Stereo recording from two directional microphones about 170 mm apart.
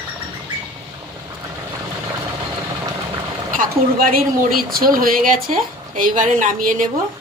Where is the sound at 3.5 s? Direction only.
55° right (ahead or behind).